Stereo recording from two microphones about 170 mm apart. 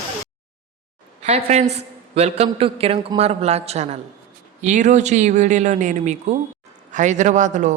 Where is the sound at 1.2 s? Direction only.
40° right (ahead or behind).